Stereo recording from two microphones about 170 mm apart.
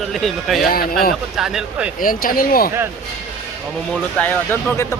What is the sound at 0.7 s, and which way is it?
Speech, 60° left (ahead or behind).